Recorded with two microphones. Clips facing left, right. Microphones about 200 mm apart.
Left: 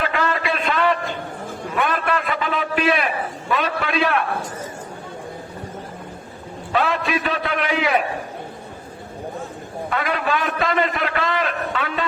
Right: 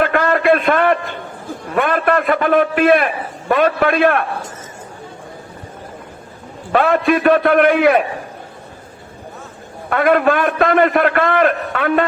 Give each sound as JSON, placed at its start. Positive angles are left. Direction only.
{"t": 0.0, "sound": "a sound", "side_deg": -55}
{"t": 3.5, "sound": "a man's voice", "side_deg": -55}
{"t": 6.7, "sound": "a man's voice", "side_deg": -55}
{"t": 9.9, "sound": "a man's voice", "side_deg": -55}